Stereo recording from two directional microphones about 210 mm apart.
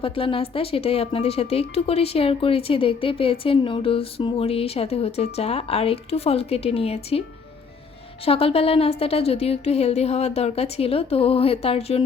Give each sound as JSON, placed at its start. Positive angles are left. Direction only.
{"t": 0.0, "sound": "speech", "side_deg": 25}
{"t": 8.2, "sound": "speech", "side_deg": 25}